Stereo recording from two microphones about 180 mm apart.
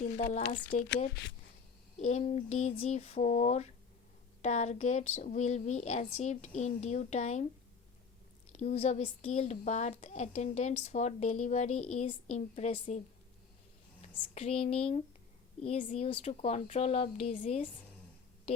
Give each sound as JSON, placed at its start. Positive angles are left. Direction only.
{"t": 0.0, "sound": "a sound", "side_deg": 40}
{"t": 0.9, "sound": "speech", "side_deg": 60}
{"t": 2.0, "sound": "speech", "side_deg": 40}
{"t": 8.5, "sound": "speech", "side_deg": 35}
{"t": 14.3, "sound": "speech", "side_deg": 35}